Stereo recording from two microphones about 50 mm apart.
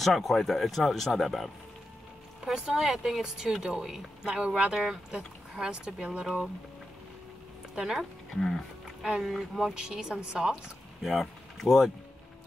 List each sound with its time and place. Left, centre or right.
0.0 s speech: centre
2.4 s speech: centre
7.7 s speech: centre
8.0 s speech: centre
9.0 s speech: centre
9.8 s speech: centre
10.5 s speech: centre